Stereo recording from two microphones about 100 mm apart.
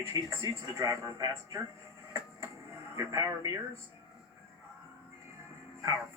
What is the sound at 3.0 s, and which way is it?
Speech, 35° right (ahead or behind).